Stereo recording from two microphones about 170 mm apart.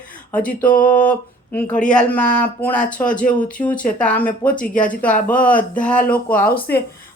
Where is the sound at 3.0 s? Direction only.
50° left (ahead or behind).